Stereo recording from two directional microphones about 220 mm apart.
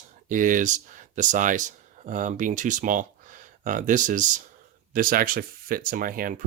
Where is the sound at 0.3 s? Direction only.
35° right (ahead or behind).